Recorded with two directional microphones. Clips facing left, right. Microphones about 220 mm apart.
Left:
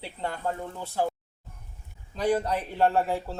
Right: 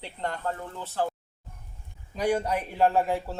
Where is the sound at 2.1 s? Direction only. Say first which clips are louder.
Even; 10° right (ahead or behind).